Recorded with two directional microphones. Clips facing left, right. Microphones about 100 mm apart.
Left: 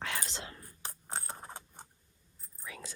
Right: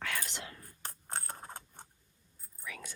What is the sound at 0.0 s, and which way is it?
Whispering, 25° left (ahead or behind).